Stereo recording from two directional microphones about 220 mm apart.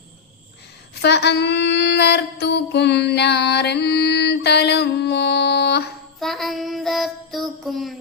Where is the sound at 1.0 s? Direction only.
50° left (ahead or behind).